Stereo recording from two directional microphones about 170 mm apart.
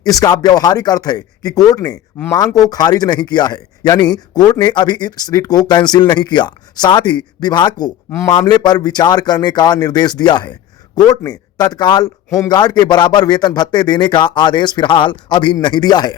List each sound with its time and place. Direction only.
0.0 s speech: 20° left (ahead or behind)